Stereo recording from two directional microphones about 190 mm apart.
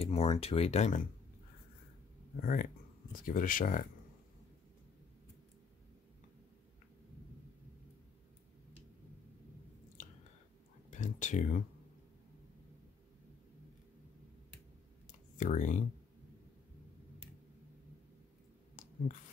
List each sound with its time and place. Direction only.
0.0 s speech: 30° left (ahead or behind)
2.4 s speech: 50° left (ahead or behind)
10.9 s speech: 40° left (ahead or behind)
15.0 s clicking: 40° left (ahead or behind)